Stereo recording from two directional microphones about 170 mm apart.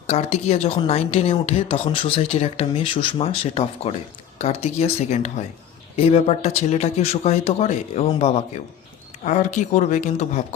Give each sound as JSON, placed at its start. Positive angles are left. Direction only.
{"t": 0.1, "sound": "speech", "side_deg": 40}